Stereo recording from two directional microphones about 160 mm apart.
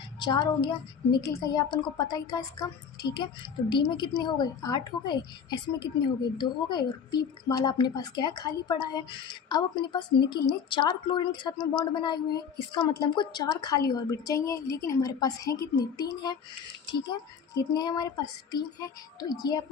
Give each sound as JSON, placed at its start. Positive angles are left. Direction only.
{"t": 0.2, "sound": "a woman's voice", "side_deg": 30}